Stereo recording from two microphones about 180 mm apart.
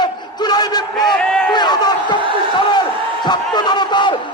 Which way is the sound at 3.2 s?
25° left (ahead or behind).